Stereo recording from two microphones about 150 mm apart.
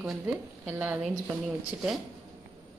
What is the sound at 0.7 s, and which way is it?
Speech, 10° right (ahead or behind).